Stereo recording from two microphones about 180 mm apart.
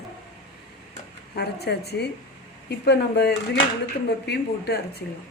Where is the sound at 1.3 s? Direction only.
65° left (ahead or behind).